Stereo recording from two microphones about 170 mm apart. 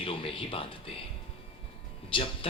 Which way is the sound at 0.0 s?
30° left (ahead or behind).